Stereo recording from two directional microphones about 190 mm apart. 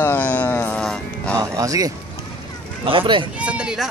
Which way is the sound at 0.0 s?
10° left (ahead or behind).